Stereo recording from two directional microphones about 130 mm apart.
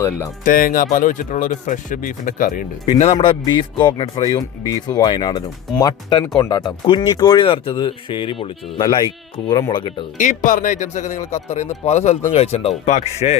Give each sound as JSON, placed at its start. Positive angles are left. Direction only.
{"t": 0.4, "sound": "speech", "side_deg": 90}
{"t": 3.2, "sound": "speech", "side_deg": 40}
{"t": 4.4, "sound": "speech", "side_deg": 30}
{"t": 7.4, "sound": "speech", "side_deg": 45}
{"t": 10.2, "sound": "speech", "side_deg": 75}